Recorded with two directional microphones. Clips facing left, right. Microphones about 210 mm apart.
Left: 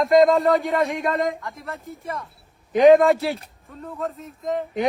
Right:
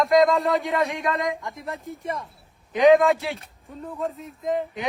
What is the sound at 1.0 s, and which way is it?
Speech, 30° left (ahead or behind).